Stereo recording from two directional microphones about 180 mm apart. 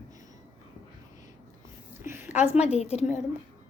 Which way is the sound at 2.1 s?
10° right (ahead or behind).